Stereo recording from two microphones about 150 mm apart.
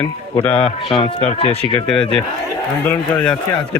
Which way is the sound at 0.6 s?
40° left (ahead or behind).